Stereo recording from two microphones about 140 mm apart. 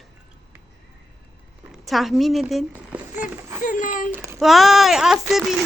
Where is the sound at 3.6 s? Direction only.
70° left (ahead or behind).